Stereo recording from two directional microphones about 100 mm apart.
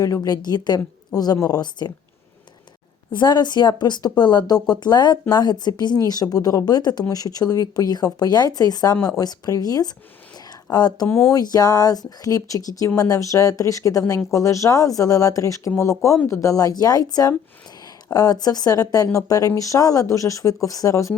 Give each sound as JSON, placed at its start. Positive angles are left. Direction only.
{"t": 0.0, "sound": "speech", "side_deg": 35}
{"t": 3.1, "sound": "speech", "side_deg": 50}
{"t": 10.3, "sound": "a sound", "side_deg": 45}
{"t": 11.3, "sound": "speech", "side_deg": 40}